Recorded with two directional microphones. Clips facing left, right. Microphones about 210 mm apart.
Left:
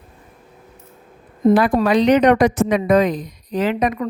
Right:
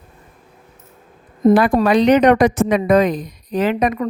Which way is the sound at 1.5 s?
50° right (ahead or behind).